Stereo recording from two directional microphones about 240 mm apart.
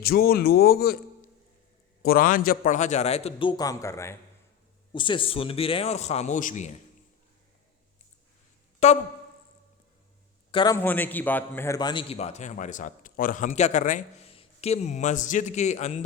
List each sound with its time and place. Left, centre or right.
0.0 s speech: left
2.0 s a man's voice: left
10.5 s a man's voice: centre